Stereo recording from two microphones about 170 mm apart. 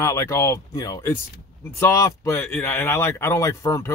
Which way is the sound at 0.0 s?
15° left (ahead or behind).